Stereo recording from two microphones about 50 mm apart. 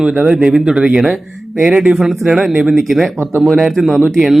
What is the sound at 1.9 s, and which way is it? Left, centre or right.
Speech, centre.